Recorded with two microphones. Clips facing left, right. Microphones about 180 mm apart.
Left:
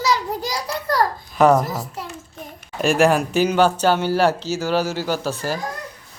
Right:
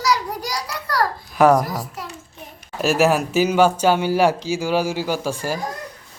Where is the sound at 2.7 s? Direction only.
5° right (ahead or behind).